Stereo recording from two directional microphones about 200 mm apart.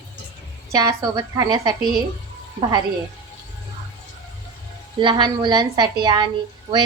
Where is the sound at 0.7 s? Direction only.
15° right (ahead or behind).